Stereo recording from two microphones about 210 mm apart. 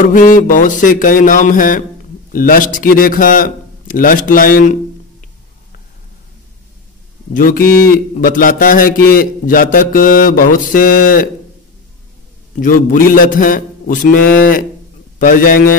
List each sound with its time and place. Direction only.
0.1 s a man's voice: 40° left (ahead or behind)
7.3 s a man's voice: 45° left (ahead or behind)
12.5 s a man's voice: 40° left (ahead or behind)